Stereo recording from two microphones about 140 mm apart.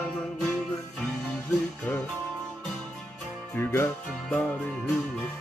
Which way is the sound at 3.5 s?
15° left (ahead or behind).